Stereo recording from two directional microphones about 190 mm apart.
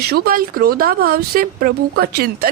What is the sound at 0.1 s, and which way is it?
A woman's voice, 50° right (ahead or behind).